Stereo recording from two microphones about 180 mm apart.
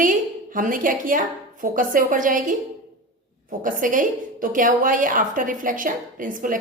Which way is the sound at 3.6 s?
45° right (ahead or behind).